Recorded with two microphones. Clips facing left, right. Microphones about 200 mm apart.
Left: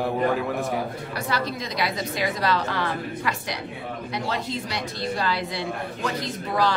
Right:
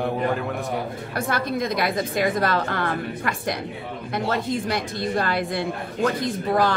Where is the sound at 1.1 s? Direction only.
50° right (ahead or behind).